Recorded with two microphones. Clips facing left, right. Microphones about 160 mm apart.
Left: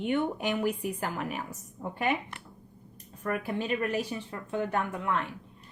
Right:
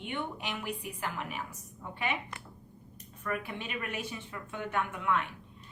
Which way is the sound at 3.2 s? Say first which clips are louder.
Left 5 dB; 40° left (ahead or behind).